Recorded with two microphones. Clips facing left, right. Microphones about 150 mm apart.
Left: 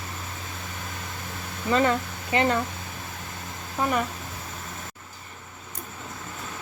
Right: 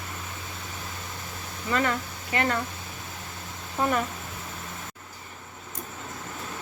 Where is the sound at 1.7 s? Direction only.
25° left (ahead or behind).